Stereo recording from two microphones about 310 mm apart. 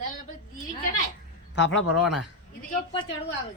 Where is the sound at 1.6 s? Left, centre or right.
Left.